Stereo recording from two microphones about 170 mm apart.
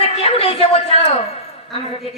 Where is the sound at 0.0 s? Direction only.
35° left (ahead or behind).